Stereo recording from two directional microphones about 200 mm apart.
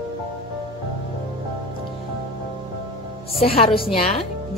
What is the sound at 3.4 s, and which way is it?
Speech, 30° left (ahead or behind).